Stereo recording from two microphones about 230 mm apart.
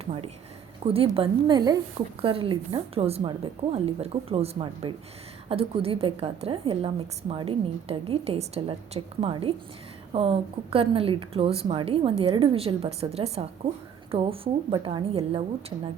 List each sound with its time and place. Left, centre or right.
0.0 s a woman's voice: right